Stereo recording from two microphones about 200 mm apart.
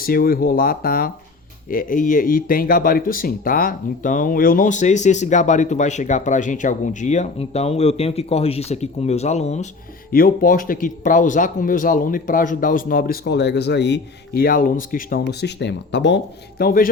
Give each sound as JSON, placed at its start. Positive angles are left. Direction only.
{"t": 0.0, "sound": "speech", "side_deg": 45}
{"t": 10.1, "sound": "speech", "side_deg": 45}
{"t": 16.6, "sound": "speech", "side_deg": 45}